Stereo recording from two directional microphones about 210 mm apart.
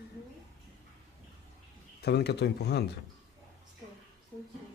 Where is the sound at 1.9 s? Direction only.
50° left (ahead or behind).